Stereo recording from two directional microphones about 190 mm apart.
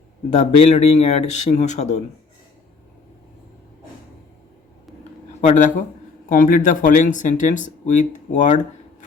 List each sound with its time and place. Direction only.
0.3 s speech: 35° left (ahead or behind)
5.4 s speech: 40° left (ahead or behind)